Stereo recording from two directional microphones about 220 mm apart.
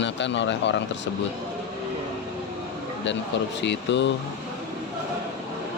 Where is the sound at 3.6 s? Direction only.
55° left (ahead or behind).